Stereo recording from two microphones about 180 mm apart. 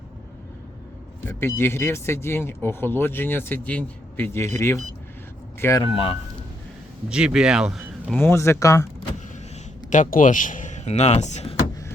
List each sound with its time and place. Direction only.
1.2 s speech: 15° left (ahead or behind)
7.1 s speech: 5° right (ahead or behind)
8.2 s speech: 15° left (ahead or behind)
9.9 s speech: 45° left (ahead or behind)